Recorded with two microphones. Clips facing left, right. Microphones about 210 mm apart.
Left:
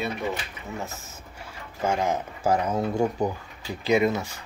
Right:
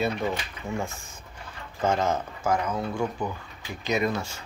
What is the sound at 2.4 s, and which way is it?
Speech, 35° left (ahead or behind).